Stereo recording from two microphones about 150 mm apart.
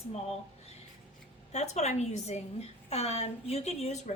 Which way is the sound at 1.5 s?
50° left (ahead or behind).